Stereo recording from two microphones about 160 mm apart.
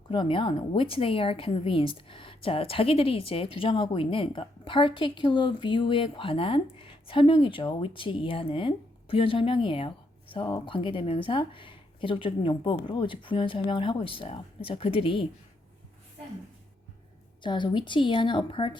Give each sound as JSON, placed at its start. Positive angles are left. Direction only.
{"t": 0.1, "sound": "speech", "side_deg": 30}
{"t": 17.4, "sound": "speech", "side_deg": 30}